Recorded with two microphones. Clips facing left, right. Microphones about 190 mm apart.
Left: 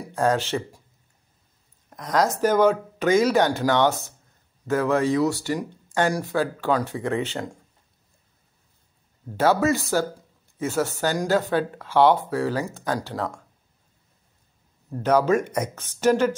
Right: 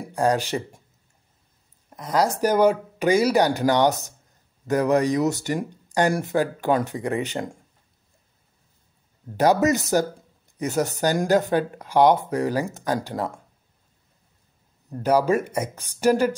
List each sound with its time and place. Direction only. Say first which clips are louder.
0.1 s speech: even; 15° right (ahead or behind)
1.9 s speech: even; 5° right (ahead or behind)
9.4 s speech: right 1 dB; 15° right (ahead or behind)
15.0 s speech: even; 10° right (ahead or behind)